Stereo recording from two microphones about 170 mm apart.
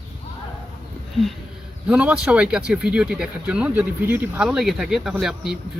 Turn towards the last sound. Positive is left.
turn(degrees=0)  # may be behind; listen again after turning